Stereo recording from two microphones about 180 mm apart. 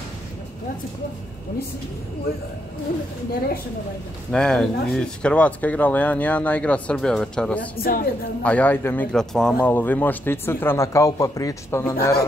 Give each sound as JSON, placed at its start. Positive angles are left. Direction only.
{"t": 4.3, "sound": "a man's voice", "side_deg": 5}
{"t": 7.8, "sound": "a woman's voice", "side_deg": 55}
{"t": 8.4, "sound": "a man's voice", "side_deg": 10}